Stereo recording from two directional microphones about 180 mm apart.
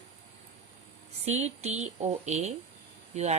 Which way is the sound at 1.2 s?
40° right (ahead or behind).